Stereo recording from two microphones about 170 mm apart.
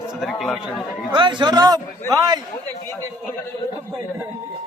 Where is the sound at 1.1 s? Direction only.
30° right (ahead or behind).